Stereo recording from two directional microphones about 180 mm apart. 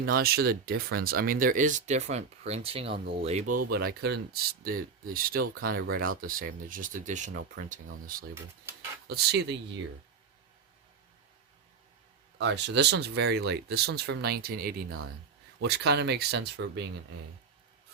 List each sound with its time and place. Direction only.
0.0 s speech: 55° right (ahead or behind); by 3.6 s 40° right (ahead or behind)
3.6 s speech: 60° right (ahead or behind)
9.0 s speech: 65° right (ahead or behind)
12.4 s speech: 75° right (ahead or behind)